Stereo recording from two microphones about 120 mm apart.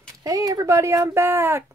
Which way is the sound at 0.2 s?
30° right (ahead or behind).